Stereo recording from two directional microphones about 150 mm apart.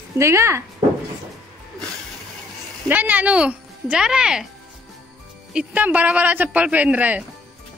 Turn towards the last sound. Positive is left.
turn(degrees=-10)  # may be behind; listen again after turning